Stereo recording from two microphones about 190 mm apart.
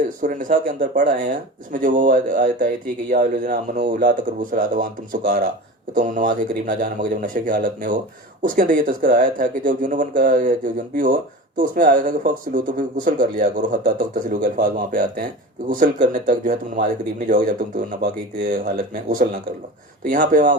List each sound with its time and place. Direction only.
0.2 s speech: 45° right (ahead or behind)